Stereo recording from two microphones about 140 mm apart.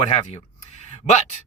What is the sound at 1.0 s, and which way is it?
Speech, 55° left (ahead or behind).